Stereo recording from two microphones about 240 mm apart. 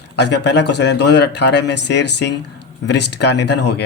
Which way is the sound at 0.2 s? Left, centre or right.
Left.